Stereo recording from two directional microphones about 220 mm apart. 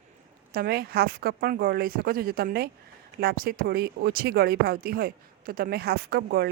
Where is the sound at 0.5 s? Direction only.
45° right (ahead or behind).